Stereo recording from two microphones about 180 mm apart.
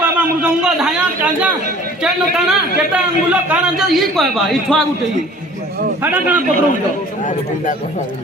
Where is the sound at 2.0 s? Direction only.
5° right (ahead or behind).